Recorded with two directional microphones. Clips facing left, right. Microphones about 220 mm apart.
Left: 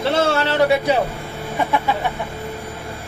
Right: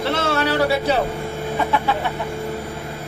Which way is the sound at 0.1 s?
30° left (ahead or behind).